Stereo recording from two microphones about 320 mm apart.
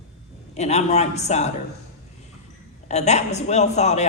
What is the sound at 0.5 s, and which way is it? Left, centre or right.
Speech, left.